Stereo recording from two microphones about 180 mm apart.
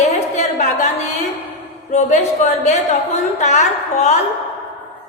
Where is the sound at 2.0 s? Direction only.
40° left (ahead or behind).